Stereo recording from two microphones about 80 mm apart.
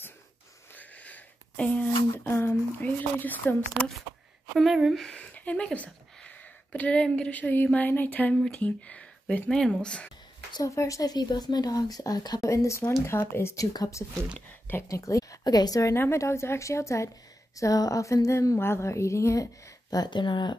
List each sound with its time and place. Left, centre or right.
0.7 s a sound: centre
2.1 s a sound: left
4.6 s a woman's voice: centre
5.1 s speech: centre
10.6 s speech: left
12.4 s speech: left
14.7 s speech: left
15.4 s speech: left
16.0 s speech: left
20.1 s speech: left